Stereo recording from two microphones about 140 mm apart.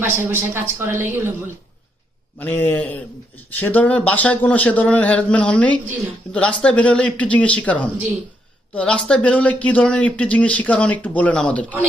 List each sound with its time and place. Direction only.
0.2 s a woman's voice: 15° right (ahead or behind)
2.4 s speech: 15° left (ahead or behind)